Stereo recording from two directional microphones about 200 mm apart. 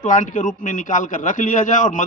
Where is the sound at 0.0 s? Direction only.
40° left (ahead or behind).